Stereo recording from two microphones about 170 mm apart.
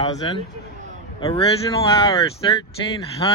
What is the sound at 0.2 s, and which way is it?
Speech, 30° left (ahead or behind).